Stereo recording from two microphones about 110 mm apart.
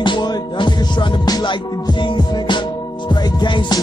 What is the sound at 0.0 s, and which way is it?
Music, 45° left (ahead or behind).